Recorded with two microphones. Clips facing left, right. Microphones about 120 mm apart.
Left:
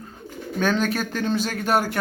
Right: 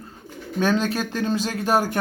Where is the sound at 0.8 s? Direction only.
35° right (ahead or behind).